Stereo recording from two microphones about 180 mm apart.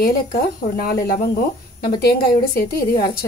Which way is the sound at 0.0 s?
60° left (ahead or behind).